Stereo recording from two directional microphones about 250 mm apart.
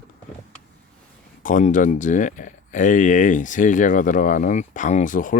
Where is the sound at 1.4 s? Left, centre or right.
Left.